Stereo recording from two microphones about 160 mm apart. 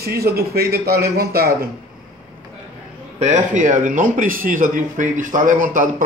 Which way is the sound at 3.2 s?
45° right (ahead or behind).